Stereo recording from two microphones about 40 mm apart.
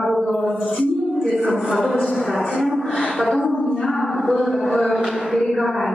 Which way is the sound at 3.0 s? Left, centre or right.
Left.